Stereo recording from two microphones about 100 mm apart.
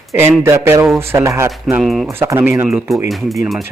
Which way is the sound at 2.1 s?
25° right (ahead or behind).